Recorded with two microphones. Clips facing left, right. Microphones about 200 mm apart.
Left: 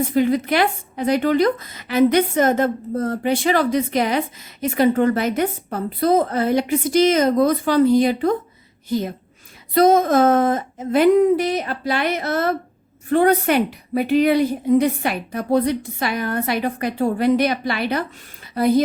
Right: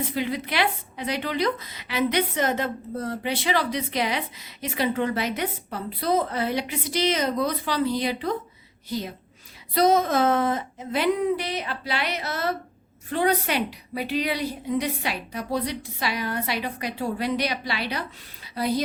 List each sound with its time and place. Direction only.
0.0 s a woman's voice: 45° left (ahead or behind)